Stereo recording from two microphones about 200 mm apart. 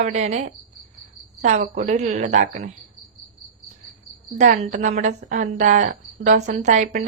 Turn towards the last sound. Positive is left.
turn(degrees=-35)  # may be behind; listen again after turning